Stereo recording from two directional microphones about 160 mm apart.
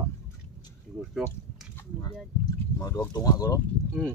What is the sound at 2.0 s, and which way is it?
Speech, 20° left (ahead or behind).